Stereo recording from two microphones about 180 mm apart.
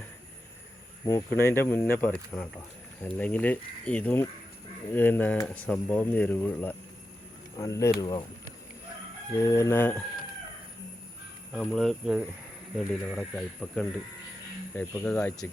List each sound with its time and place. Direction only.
1.0 s speech: 15° left (ahead or behind)
9.4 s speech: 15° left (ahead or behind)
11.5 s speech: 5° left (ahead or behind)